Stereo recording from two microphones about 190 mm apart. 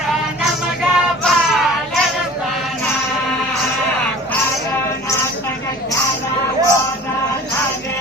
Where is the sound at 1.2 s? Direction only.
Centre (ahead or behind).